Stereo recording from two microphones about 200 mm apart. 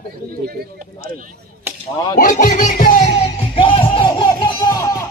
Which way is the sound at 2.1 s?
45° left (ahead or behind).